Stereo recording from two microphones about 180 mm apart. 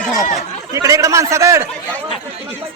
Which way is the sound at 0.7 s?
15° right (ahead or behind).